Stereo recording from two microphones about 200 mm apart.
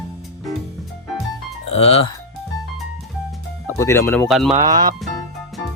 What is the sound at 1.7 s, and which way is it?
Speech, 30° left (ahead or behind).